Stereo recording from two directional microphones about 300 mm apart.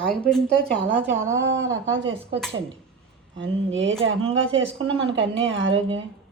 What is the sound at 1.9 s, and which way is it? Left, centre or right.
Speech, right.